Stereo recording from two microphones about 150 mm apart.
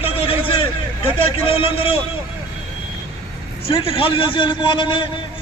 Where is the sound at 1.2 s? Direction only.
35° left (ahead or behind).